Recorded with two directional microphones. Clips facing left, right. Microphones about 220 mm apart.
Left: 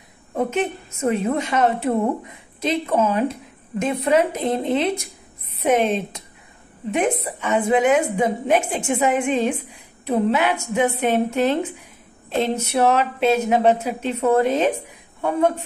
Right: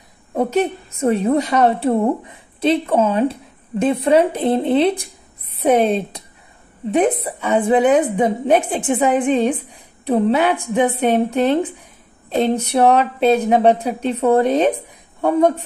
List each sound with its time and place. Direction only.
0.4 s a woman's voice: 35° right (ahead or behind)